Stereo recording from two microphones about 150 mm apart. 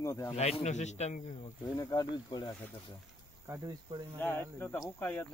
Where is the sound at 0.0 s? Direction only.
20° left (ahead or behind).